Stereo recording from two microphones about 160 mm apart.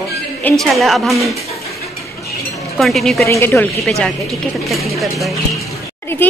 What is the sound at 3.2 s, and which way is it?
Speech, 15° left (ahead or behind).